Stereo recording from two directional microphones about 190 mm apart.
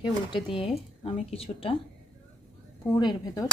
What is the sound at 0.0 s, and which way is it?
Speech, 25° left (ahead or behind).